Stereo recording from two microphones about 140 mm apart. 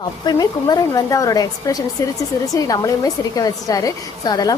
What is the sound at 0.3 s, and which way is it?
A woman's voice, 25° left (ahead or behind).